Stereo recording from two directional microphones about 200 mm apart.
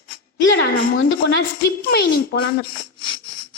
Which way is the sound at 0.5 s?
70° left (ahead or behind).